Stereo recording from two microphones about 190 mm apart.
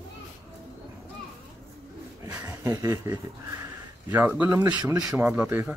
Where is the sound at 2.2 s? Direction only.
10° right (ahead or behind).